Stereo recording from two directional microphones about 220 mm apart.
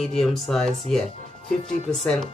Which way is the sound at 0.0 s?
Centre (ahead or behind).